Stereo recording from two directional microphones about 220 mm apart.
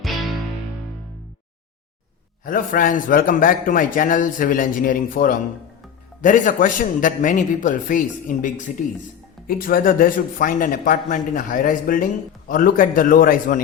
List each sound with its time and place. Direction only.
2.4 s a man's voice: 40° left (ahead or behind)